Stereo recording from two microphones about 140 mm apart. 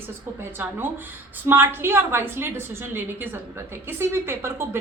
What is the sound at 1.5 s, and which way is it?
A woman's voice, 15° right (ahead or behind).